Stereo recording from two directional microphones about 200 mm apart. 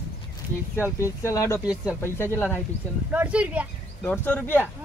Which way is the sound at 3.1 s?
5° right (ahead or behind).